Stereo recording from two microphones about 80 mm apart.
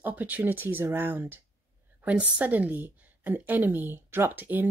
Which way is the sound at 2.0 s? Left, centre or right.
Centre.